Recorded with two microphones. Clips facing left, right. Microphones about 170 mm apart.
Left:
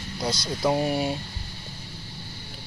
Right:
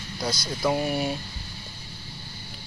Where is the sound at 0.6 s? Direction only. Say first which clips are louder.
Left 1 dB; 25° left (ahead or behind).